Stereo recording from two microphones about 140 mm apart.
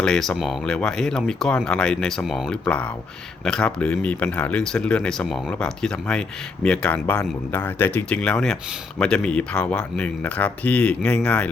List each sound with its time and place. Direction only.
0.0 s speech: 5° left (ahead or behind)